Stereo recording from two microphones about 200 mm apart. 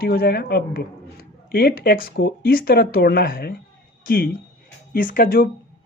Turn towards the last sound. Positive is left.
turn(degrees=45)  # may be behind; listen again after turning